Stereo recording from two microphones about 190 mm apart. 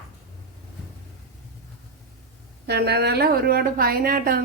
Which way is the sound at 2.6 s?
60° right (ahead or behind).